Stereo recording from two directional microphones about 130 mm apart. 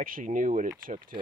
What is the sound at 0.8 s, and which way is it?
Speech, 90° right.